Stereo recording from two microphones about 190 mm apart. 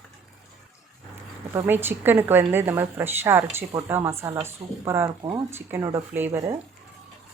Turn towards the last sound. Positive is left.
turn(degrees=-15)  # may be behind; listen again after turning